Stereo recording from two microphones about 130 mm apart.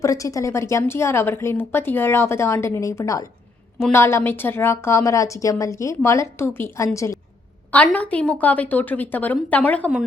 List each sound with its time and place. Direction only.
0.0 s a woman's voice: 25° left (ahead or behind)
7.7 s a woman's voice: 10° left (ahead or behind)